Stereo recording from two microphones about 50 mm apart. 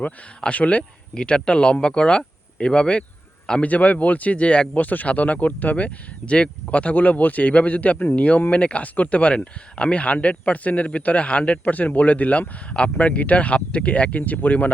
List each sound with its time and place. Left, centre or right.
0.0 s speech: left
3.6 s speech: left
4.8 s speech: left